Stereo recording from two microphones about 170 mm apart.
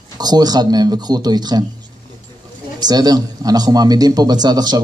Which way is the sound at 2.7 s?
25° right (ahead or behind).